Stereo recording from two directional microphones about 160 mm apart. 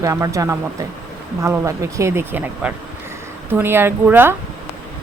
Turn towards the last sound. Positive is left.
turn(degrees=-15)  # may be behind; listen again after turning